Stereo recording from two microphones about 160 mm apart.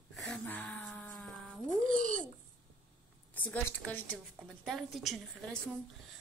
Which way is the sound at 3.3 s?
10° left (ahead or behind).